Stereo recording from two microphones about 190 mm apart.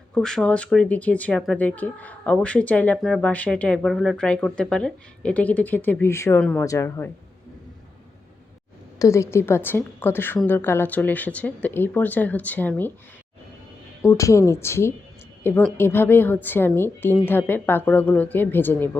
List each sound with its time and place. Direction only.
0.1 s speech: 5° left (ahead or behind)
9.0 s speech: 15° left (ahead or behind)
14.0 s speech: 15° left (ahead or behind)